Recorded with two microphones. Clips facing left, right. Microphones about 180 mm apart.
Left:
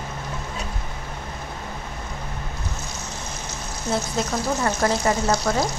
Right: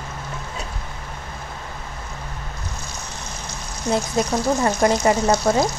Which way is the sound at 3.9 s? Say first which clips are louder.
Right 4 dB; 15° right (ahead or behind).